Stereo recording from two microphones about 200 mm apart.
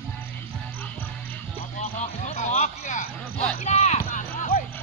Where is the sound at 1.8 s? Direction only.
35° left (ahead or behind).